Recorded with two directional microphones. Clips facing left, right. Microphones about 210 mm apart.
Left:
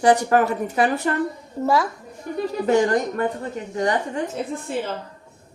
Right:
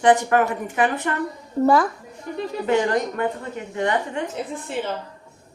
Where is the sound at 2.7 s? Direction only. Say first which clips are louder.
Left 2 dB; 40° left (ahead or behind).